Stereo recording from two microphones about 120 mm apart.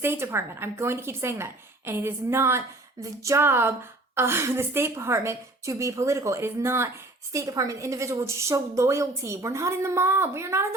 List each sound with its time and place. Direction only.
0.0 s speech: 20° right (ahead or behind)